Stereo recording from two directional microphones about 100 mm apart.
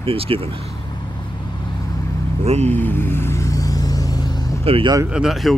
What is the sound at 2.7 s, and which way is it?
Vehicle, 20° left (ahead or behind).